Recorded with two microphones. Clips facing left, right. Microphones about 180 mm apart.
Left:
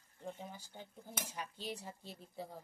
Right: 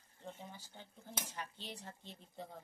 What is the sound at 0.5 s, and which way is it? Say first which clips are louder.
Speech: left 3 dB; 10° left (ahead or behind).